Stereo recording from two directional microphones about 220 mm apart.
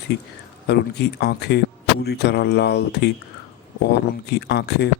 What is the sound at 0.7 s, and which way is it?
Speech, 50° left (ahead or behind).